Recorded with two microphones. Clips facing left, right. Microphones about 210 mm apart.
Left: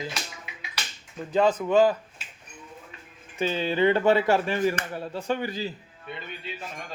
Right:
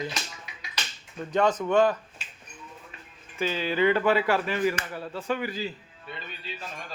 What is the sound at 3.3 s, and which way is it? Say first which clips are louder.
Speech: left 2 dB; 25° left (ahead or behind).